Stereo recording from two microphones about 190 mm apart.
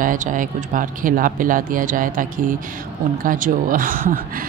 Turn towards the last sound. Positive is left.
turn(degrees=-45)  # may be behind; listen again after turning